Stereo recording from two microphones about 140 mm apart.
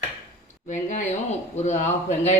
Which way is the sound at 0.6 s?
60° left (ahead or behind).